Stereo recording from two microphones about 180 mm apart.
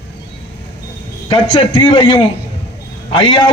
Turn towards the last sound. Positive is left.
turn(degrees=25)  # may be behind; listen again after turning